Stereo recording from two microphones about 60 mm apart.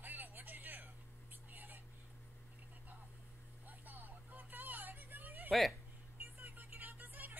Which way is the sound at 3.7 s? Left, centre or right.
Right.